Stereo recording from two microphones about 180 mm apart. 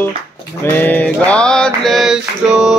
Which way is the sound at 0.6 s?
10° left (ahead or behind).